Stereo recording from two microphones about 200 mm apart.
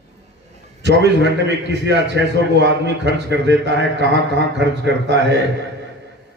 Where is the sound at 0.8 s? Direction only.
60° right (ahead or behind).